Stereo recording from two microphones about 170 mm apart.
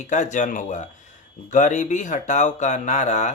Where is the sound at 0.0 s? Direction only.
45° left (ahead or behind).